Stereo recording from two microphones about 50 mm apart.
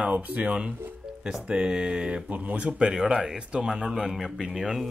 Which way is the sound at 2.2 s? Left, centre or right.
Right.